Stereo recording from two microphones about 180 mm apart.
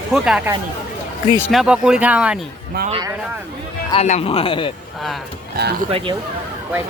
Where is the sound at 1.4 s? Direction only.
5° left (ahead or behind).